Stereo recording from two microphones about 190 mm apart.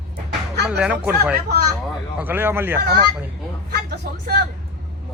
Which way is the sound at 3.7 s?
55° right (ahead or behind).